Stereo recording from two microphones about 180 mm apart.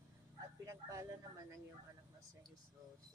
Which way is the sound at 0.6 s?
15° right (ahead or behind).